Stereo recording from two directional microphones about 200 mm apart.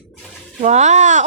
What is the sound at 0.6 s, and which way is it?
Speech, 35° right (ahead or behind).